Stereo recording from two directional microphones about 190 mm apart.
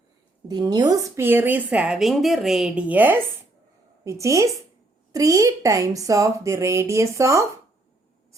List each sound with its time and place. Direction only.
0.4 s a woman's voice: 20° right (ahead or behind)